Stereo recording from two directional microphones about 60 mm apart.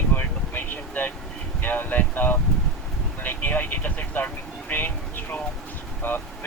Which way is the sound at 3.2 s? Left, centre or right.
Left.